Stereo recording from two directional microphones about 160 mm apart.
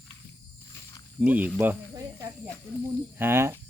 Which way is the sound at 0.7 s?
20° left (ahead or behind).